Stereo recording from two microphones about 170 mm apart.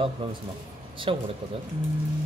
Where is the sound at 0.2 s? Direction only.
30° right (ahead or behind).